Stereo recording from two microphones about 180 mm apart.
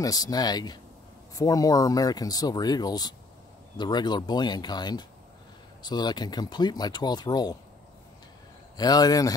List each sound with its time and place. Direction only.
0.0 s speech: 20° left (ahead or behind)
8.7 s speech: 20° left (ahead or behind)